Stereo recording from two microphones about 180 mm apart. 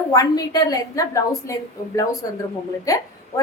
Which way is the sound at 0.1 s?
20° left (ahead or behind).